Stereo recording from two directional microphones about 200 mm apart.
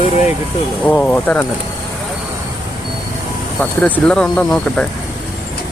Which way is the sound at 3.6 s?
5° left (ahead or behind).